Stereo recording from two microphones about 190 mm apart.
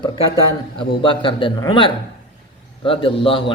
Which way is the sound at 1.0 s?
25° left (ahead or behind).